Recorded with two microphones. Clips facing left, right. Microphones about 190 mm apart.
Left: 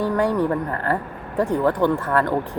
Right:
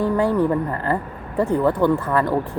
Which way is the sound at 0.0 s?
5° right (ahead or behind).